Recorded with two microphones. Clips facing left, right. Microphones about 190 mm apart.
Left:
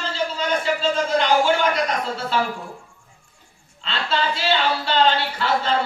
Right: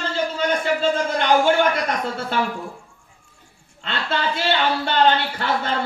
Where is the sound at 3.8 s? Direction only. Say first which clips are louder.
Even; 55° right (ahead or behind).